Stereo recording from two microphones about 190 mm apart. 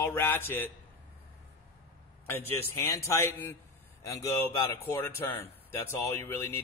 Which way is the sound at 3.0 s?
15° left (ahead or behind).